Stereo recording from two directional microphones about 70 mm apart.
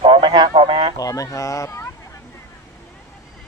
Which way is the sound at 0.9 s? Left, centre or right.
Left.